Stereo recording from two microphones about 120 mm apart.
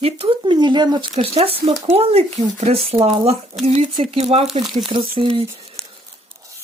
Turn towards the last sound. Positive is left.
turn(degrees=5)  # may be behind; listen again after turning